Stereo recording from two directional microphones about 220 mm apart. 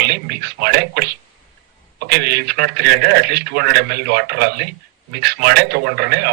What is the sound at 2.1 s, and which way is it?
A man's voice, 50° right (ahead or behind).